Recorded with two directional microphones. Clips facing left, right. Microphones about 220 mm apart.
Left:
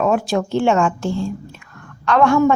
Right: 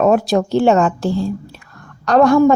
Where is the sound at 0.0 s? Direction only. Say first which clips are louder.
Right 4 dB; 40° right (ahead or behind).